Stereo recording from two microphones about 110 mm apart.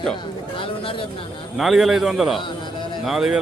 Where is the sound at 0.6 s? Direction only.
50° left (ahead or behind).